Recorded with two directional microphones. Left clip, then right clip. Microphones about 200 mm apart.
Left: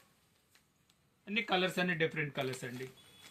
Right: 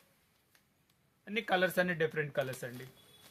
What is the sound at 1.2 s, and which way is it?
Speech, 35° right (ahead or behind).